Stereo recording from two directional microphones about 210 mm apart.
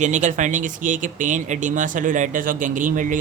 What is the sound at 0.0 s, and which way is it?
Speech, 35° right (ahead or behind).